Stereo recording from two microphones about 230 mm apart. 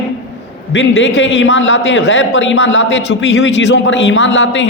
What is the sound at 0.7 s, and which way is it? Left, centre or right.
A man's voice, left.